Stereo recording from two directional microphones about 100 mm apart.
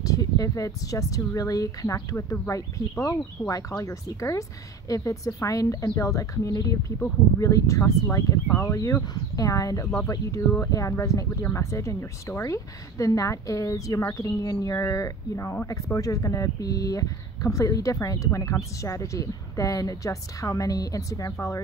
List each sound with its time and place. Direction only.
0.0 s speech: 35° left (ahead or behind)